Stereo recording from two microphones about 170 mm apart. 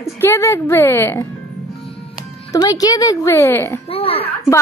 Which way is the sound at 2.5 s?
20° left (ahead or behind).